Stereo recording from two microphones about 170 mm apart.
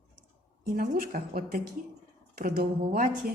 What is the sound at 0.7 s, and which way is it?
A woman's voice, 60° right (ahead or behind).